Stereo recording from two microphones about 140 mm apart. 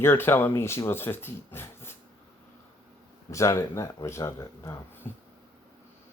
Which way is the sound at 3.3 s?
20° left (ahead or behind).